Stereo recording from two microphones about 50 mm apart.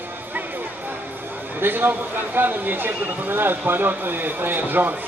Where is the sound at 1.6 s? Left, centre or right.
Right.